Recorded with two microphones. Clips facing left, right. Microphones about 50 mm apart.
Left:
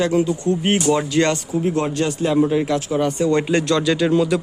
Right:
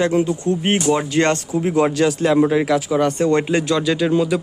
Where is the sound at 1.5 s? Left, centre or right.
Right.